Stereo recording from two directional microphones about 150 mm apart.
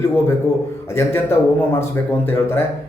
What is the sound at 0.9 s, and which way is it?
Speech, 15° left (ahead or behind).